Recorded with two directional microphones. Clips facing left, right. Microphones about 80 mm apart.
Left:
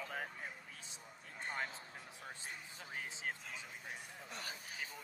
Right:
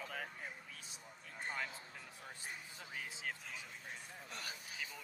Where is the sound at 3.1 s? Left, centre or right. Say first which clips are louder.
Left 2 dB; left.